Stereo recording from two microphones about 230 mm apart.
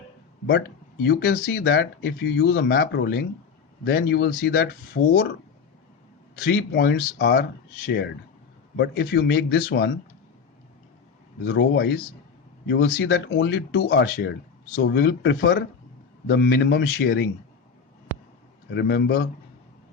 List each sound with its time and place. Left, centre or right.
1.0 s speech: left
6.4 s speech: left
8.7 s speech: left
11.4 s speech: left
18.7 s speech: left